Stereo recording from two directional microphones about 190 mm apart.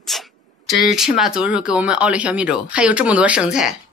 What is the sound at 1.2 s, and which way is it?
Speech, 5° right (ahead or behind).